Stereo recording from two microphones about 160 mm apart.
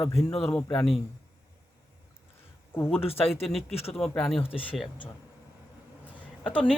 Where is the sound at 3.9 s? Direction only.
5° left (ahead or behind).